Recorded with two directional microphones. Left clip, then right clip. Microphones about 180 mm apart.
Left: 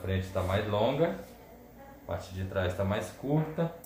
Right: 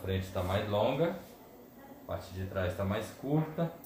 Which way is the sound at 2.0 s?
25° left (ahead or behind).